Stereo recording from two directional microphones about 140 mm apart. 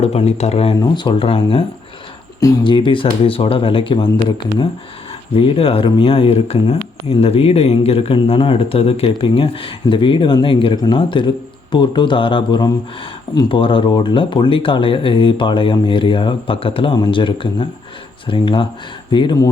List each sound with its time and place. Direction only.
0.0 s speech: 50° left (ahead or behind)
0.8 s speech: 35° left (ahead or behind)
2.4 s speech: 30° left (ahead or behind)
5.3 s speech: 40° left (ahead or behind)